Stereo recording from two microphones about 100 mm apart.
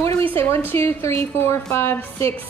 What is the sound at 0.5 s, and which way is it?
Speech, 25° left (ahead or behind).